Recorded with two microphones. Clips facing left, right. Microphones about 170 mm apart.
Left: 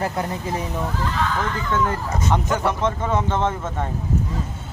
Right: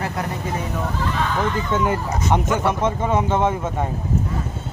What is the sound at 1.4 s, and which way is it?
Speech, 20° right (ahead or behind).